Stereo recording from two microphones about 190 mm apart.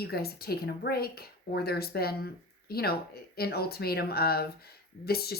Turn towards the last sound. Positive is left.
turn(degrees=55)  # may be behind; listen again after turning